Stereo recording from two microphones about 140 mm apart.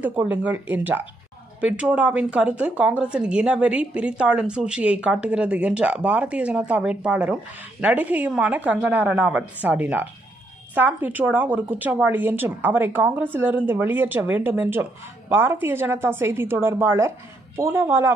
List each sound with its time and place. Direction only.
0.0 s a woman's voice: 10° right (ahead or behind)